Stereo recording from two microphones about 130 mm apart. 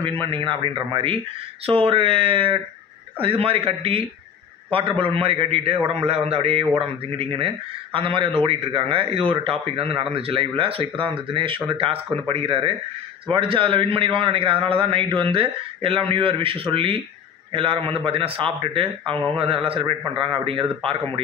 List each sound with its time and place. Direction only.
0.0 s a man's voice: 40° right (ahead or behind)